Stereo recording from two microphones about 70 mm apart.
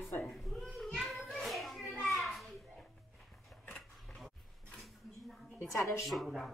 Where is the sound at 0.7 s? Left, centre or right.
Centre.